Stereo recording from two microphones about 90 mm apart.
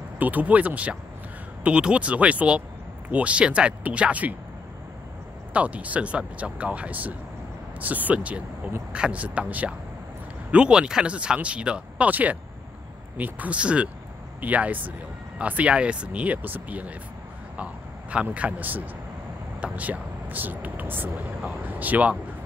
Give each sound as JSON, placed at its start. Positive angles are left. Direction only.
{"t": 0.2, "sound": "speech", "side_deg": -20}
{"t": 5.5, "sound": "speech", "side_deg": -15}
{"t": 18.1, "sound": "speech", "side_deg": -15}